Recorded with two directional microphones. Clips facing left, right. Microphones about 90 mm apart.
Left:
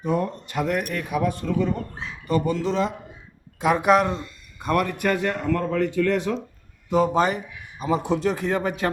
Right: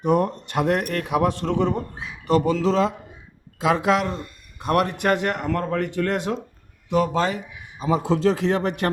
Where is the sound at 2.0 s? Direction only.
10° right (ahead or behind).